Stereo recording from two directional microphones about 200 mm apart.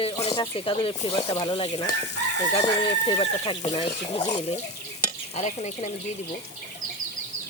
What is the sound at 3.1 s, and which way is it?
Speech, 25° left (ahead or behind).